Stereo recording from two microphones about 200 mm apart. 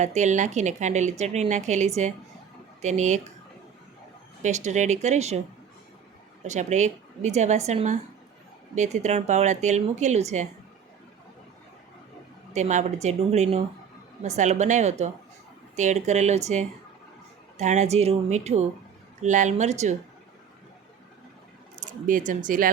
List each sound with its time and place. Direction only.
0.0 s speech: 35° right (ahead or behind)
4.4 s speech: 35° right (ahead or behind)
6.4 s speech: 35° right (ahead or behind)
12.5 s speech: 35° right (ahead or behind)
21.8 s speech: 40° right (ahead or behind)